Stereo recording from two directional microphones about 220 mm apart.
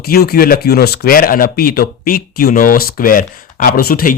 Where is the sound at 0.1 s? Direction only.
45° left (ahead or behind).